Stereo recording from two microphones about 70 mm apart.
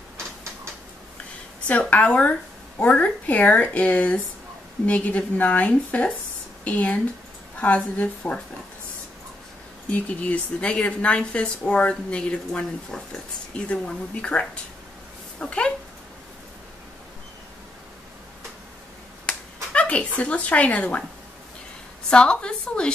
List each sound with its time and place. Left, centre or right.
1.7 s speech: centre
9.9 s a woman's voice: centre
19.2 s a sound: centre
22.1 s a woman's voice: centre